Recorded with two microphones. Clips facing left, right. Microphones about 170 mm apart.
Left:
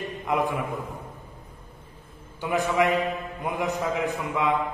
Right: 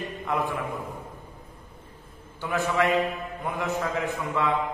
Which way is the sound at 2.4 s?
15° left (ahead or behind).